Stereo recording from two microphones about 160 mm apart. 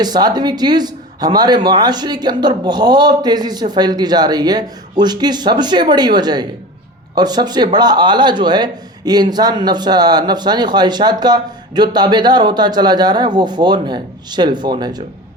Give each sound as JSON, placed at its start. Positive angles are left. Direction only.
{"t": 0.0, "sound": "speech", "side_deg": -25}